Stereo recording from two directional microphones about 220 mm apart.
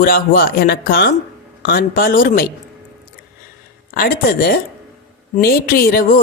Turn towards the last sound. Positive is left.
turn(degrees=40)  # may be behind; listen again after turning